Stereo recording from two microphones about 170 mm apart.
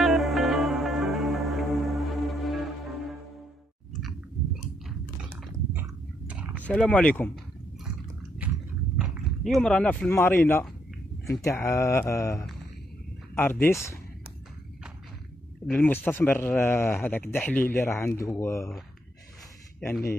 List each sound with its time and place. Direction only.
0.0 s music: centre (ahead or behind)
5.7 s a sound: 10° right (ahead or behind)
6.6 s speech: 5° left (ahead or behind)
8.4 s biting: 10° right (ahead or behind)
8.9 s speech: centre (ahead or behind); by 13.9 s 15° left (ahead or behind)
15.6 s speech: 10° left (ahead or behind)